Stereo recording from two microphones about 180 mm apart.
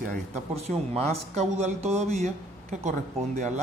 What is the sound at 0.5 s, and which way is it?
Speech, 35° right (ahead or behind).